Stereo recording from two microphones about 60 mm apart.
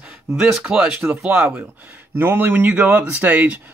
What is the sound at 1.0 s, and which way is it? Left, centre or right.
Speech, right.